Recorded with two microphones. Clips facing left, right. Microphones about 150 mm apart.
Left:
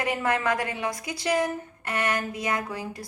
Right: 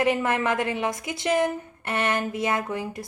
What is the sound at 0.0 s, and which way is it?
A woman's voice, 20° right (ahead or behind).